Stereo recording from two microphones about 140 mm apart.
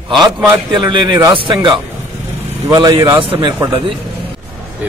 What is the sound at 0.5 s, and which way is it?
A man's voice, 35° right (ahead or behind).